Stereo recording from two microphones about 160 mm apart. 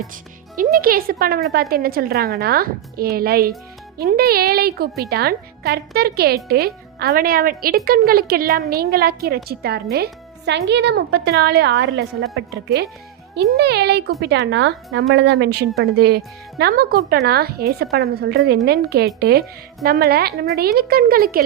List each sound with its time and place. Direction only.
0.5 s a woman's voice: 60° right (ahead or behind); by 15.6 s 90° right
15.8 s a woman's voice: 80° right